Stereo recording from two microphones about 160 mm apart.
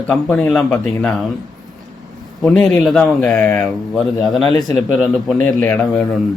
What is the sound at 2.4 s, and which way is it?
Speech, 5° left (ahead or behind).